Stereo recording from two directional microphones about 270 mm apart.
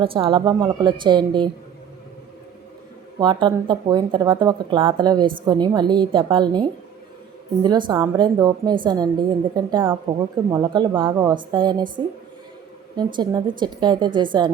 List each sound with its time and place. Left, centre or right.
0.0 s speech: centre
3.2 s speech: centre